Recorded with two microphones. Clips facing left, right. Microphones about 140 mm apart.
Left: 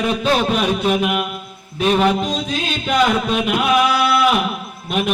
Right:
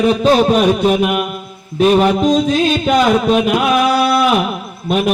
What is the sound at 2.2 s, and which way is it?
Music, 45° right (ahead or behind).